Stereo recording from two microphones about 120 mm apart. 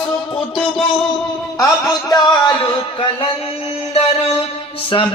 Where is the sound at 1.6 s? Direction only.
35° left (ahead or behind).